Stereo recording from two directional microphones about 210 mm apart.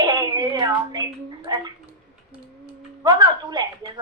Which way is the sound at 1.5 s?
20° right (ahead or behind).